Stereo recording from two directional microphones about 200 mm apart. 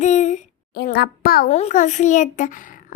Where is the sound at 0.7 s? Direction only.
50° left (ahead or behind).